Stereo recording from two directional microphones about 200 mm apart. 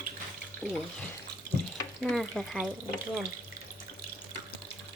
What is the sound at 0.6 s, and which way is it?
Speech, centre (ahead or behind).